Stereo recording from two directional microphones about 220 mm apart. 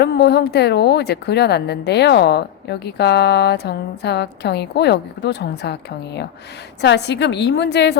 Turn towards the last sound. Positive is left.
turn(degrees=50)  # may be behind; listen again after turning